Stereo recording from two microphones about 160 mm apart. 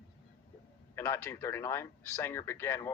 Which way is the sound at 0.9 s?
15° left (ahead or behind).